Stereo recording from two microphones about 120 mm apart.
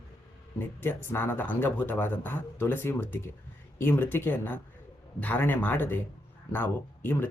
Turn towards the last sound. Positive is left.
turn(degrees=15)  # may be behind; listen again after turning